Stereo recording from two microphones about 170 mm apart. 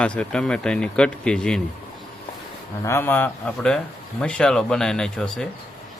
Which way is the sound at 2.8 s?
15° left (ahead or behind).